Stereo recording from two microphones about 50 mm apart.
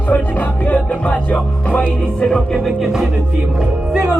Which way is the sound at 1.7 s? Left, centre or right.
Left.